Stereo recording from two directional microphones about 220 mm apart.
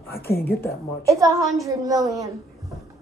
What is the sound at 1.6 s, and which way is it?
Speech, 15° right (ahead or behind).